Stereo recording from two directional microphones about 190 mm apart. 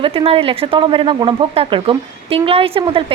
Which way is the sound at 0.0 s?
30° right (ahead or behind).